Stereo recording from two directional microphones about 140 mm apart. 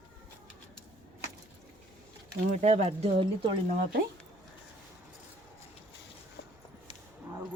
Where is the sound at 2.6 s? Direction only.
50° right (ahead or behind).